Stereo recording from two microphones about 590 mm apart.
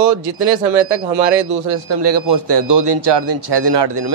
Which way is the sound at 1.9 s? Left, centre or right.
Right.